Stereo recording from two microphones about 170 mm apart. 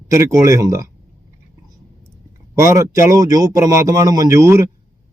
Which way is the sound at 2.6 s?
20° right (ahead or behind).